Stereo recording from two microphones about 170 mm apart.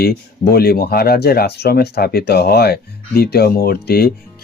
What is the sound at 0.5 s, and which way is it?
Speech, 65° left (ahead or behind).